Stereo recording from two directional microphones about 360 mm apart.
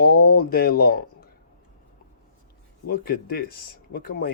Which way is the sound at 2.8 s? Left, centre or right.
Left.